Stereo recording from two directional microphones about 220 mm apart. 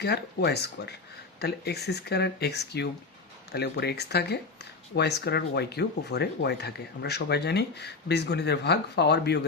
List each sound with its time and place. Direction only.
0.0 s speech: 50° left (ahead or behind)